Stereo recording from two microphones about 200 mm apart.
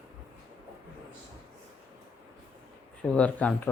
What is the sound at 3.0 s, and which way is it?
Speech, 5° left (ahead or behind).